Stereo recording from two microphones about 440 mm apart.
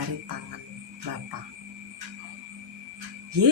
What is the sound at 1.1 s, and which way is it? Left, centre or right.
Speech, right.